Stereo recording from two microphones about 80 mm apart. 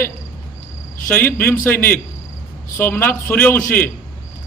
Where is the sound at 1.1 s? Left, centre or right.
Left.